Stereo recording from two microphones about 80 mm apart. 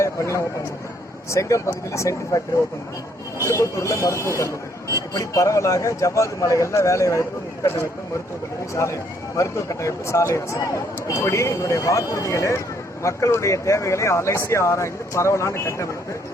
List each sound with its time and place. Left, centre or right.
0.0 s a man's voice: left
3.4 s speech: left